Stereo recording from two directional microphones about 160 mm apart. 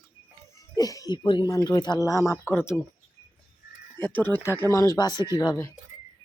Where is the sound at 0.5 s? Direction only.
20° left (ahead or behind).